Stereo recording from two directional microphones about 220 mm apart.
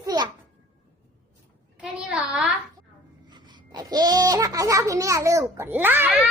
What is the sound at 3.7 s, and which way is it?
A child's voice, 20° right (ahead or behind).